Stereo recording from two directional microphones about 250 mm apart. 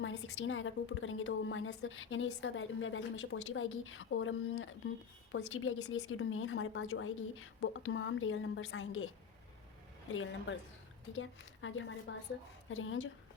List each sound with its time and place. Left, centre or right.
0.0 s a woman's voice: left
10.1 s a woman's voice: left